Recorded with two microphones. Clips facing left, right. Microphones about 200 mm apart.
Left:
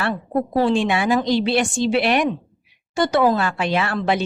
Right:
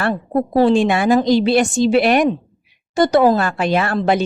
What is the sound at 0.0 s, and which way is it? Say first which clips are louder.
A woman's voice: right 3 dB; 40° right (ahead or behind).